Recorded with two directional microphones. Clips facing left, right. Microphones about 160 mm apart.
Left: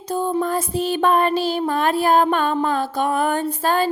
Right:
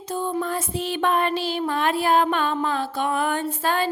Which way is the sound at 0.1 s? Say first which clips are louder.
Left 5 dB; 40° left (ahead or behind).